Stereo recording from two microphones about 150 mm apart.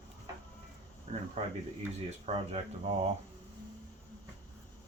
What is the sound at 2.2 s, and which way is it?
Speech, 45° right (ahead or behind).